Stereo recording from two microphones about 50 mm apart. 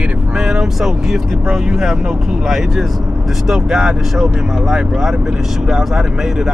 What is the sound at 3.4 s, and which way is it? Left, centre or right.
Speech, centre.